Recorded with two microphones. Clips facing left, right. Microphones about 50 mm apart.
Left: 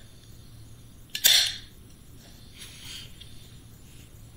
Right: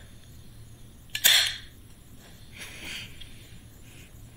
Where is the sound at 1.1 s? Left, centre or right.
Right.